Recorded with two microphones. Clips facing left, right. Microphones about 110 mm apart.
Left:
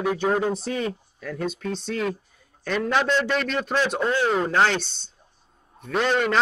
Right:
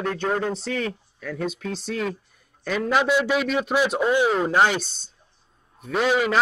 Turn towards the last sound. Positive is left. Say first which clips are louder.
# right 1 dB
turn(degrees=-5)  # may be behind; listen again after turning